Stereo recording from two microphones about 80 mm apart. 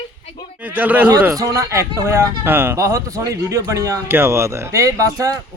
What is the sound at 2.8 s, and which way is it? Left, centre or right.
Speech, right.